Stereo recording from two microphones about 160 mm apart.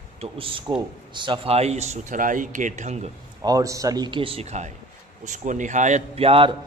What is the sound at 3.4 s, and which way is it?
A man's voice, 20° right (ahead or behind).